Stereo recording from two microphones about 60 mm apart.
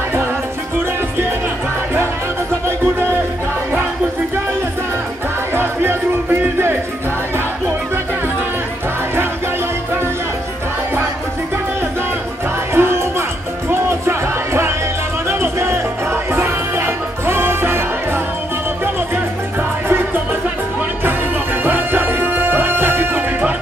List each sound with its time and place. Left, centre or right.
5.5 s music: right
12.7 s music: right
21.6 s music: right